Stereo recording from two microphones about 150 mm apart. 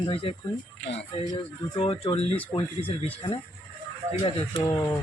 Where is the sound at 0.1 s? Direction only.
40° left (ahead or behind).